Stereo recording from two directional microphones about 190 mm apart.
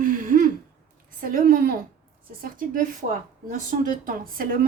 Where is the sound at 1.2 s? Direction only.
45° right (ahead or behind).